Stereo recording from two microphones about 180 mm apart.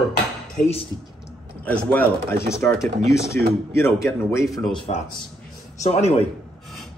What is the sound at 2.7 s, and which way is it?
Speech, centre (ahead or behind).